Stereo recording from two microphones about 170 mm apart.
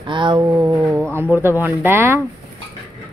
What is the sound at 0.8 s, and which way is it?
Speech, 5° right (ahead or behind).